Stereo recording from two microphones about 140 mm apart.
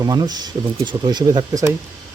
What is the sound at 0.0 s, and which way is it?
Speech, 30° right (ahead or behind).